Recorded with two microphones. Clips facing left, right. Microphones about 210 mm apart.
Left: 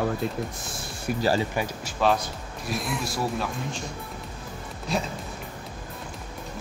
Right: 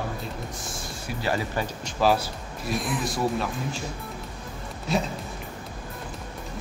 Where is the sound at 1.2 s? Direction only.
30° left (ahead or behind).